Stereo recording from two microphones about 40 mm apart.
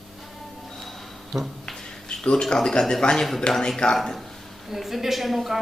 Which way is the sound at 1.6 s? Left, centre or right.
Centre.